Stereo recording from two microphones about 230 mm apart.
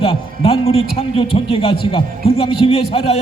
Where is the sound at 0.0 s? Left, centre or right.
Left.